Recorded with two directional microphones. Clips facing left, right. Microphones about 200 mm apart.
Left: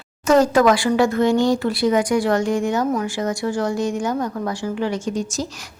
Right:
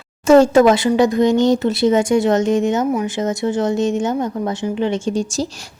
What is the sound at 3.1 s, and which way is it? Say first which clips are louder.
Speech: right 3 dB; 20° right (ahead or behind).